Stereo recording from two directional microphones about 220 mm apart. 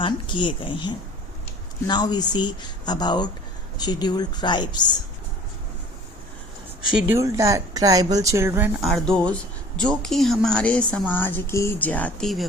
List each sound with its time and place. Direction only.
0.0 s speech: 20° left (ahead or behind)
6.9 s a woman's voice: 10° right (ahead or behind)